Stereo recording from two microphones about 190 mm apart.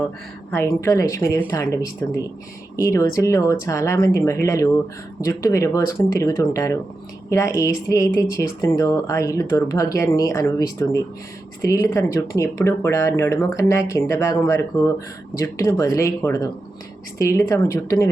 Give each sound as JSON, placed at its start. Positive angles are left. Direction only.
{"t": 0.5, "sound": "speech", "side_deg": 15}